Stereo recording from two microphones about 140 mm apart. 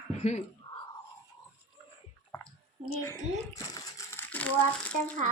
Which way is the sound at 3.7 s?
15° left (ahead or behind).